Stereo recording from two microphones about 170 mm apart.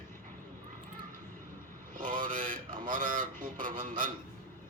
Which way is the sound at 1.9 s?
50° right (ahead or behind).